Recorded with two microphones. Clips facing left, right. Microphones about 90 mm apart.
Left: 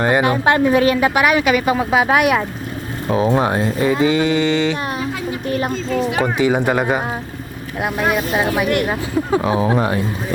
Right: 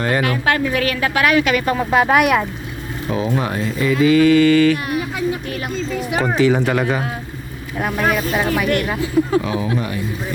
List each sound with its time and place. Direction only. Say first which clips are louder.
0.0 s speech: left 3 dB; 25° left (ahead or behind); by 2.5 s centre (ahead or behind)
3.1 s a sound: left 5 dB; 35° left (ahead or behind)
5.5 s speech: left 4 dB; 30° left (ahead or behind)
6.2 s speech: right 4 dB; 15° left (ahead or behind)
9.4 s speech: left 5 dB; 35° left (ahead or behind)